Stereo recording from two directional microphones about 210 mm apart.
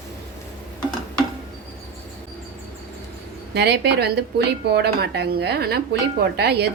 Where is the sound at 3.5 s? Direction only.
50° right (ahead or behind).